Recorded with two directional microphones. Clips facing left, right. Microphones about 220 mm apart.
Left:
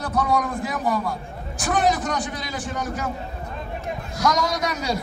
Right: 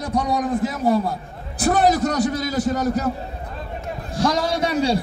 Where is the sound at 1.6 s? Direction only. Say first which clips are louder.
Right 5 dB; 40° right (ahead or behind).